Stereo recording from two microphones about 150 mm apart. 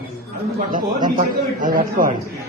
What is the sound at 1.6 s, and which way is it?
Speech, 65° right (ahead or behind).